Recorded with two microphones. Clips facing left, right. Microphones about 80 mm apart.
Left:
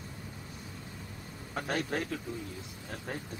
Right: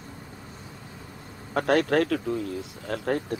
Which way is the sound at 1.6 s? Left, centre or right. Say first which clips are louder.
Right 12 dB; right.